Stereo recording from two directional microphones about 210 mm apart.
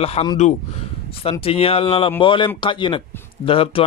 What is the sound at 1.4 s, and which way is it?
Speech, 25° left (ahead or behind).